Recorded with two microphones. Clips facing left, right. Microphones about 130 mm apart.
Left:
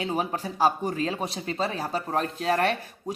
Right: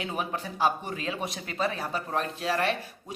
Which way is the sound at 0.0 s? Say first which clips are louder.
Left 4 dB; 35° left (ahead or behind).